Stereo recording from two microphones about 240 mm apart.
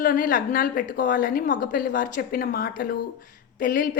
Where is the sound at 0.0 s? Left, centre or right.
Left.